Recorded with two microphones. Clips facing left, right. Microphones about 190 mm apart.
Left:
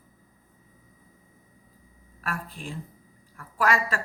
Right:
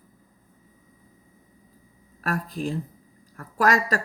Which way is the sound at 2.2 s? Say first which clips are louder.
Right 7 dB; 40° right (ahead or behind).